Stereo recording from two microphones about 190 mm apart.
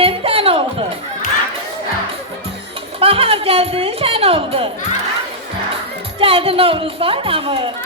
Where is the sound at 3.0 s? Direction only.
30° right (ahead or behind).